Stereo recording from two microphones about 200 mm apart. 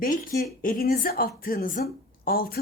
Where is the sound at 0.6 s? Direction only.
45° left (ahead or behind).